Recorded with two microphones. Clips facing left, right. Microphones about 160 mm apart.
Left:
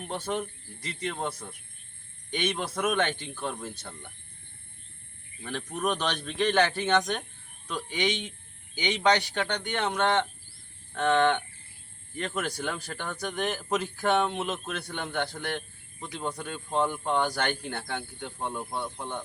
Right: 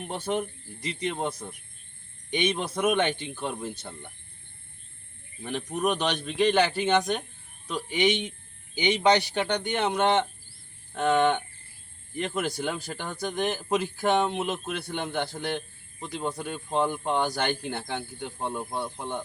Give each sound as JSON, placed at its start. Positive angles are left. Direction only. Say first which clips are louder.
{"t": 0.0, "sound": "speech", "louder": "right 2 dB", "side_deg": -10}
{"t": 2.3, "sound": "speech", "louder": "right 3 dB", "side_deg": -10}
{"t": 5.4, "sound": "speech", "louder": "right 3 dB", "side_deg": -15}